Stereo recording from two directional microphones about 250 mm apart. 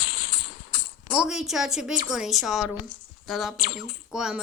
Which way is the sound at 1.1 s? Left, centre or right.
Centre.